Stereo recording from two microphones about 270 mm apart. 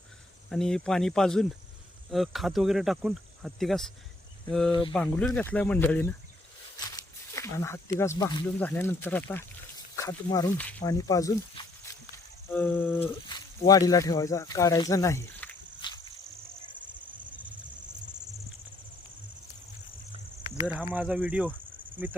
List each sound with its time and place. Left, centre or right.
0.5 s speech: centre
4.7 s speech: centre
4.9 s speech: centre
6.7 s a sound: centre
7.9 s speech: centre
15.8 s a sound: centre
20.6 s speech: centre